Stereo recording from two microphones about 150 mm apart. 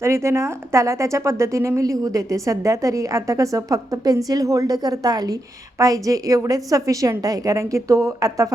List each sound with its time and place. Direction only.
0.0 s a woman's voice: 20° right (ahead or behind)